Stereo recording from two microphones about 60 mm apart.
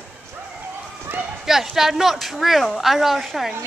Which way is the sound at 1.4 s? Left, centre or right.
Centre.